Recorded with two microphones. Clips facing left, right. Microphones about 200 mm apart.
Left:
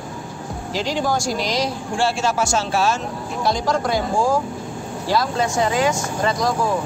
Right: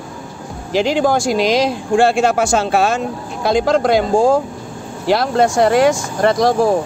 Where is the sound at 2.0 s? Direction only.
55° right (ahead or behind).